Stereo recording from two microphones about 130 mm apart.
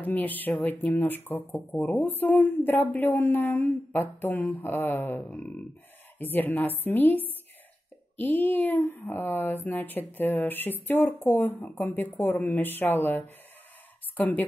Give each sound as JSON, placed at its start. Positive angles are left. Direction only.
{"t": 0.0, "sound": "a woman's voice", "side_deg": 15}